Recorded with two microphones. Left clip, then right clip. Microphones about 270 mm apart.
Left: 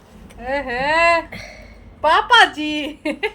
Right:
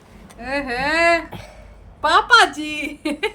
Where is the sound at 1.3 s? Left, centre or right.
Right.